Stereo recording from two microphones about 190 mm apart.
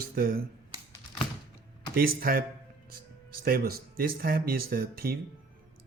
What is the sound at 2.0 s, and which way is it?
Speech, 50° right (ahead or behind).